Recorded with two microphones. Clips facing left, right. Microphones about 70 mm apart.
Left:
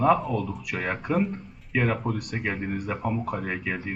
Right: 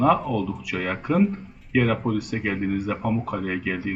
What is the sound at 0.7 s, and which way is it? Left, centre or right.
Speech, centre.